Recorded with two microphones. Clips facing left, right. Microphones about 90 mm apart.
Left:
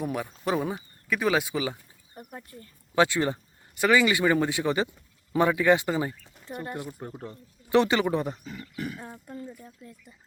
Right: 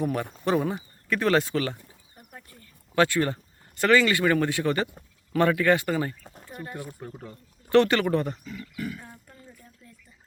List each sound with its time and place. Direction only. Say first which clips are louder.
0.0 s speech: right 3 dB; 5° left (ahead or behind)
2.2 s a sound: left 9 dB; 40° left (ahead or behind)
2.9 s speech: even; 15° left (ahead or behind)
8.7 s speech: even; 25° left (ahead or behind)